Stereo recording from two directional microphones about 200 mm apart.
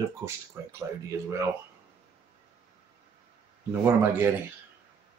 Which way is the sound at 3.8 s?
10° right (ahead or behind).